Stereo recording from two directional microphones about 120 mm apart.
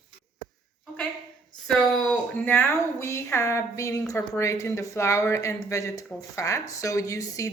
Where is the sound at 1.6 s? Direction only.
10° left (ahead or behind).